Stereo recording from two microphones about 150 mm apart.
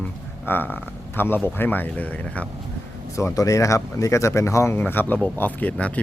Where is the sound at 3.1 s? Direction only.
20° left (ahead or behind).